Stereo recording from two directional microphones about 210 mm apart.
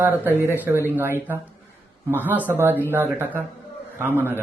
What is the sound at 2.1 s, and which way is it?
Speech, 10° right (ahead or behind).